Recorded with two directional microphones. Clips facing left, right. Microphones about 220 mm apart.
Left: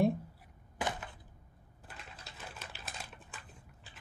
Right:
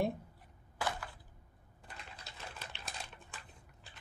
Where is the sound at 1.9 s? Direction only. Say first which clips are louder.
Even; centre (ahead or behind).